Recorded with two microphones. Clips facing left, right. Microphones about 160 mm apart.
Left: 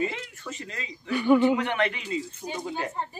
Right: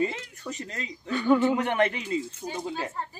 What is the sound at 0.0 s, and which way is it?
Speech, 35° right (ahead or behind).